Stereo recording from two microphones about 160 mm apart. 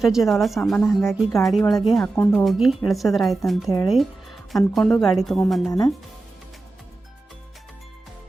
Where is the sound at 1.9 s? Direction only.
10° left (ahead or behind).